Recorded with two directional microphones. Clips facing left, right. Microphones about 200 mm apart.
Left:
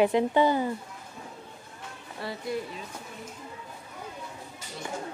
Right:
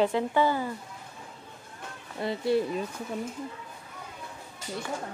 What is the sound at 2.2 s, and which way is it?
Speech, 25° right (ahead or behind).